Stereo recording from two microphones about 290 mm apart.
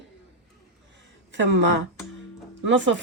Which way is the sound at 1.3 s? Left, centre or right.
Right.